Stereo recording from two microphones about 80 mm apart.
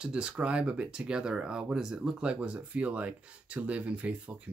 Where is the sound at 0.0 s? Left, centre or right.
Centre.